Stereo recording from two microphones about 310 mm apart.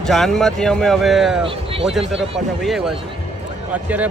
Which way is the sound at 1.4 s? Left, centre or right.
Centre.